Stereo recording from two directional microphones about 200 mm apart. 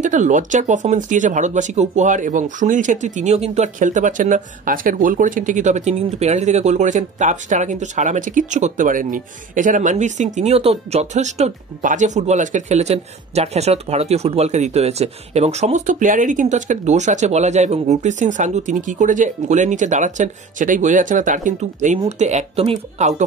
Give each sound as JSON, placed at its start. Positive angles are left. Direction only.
{"t": 0.0, "sound": "speech", "side_deg": -40}